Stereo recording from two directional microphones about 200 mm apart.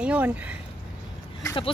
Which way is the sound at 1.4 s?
25° left (ahead or behind).